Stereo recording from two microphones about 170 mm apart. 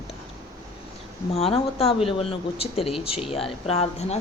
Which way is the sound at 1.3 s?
35° left (ahead or behind).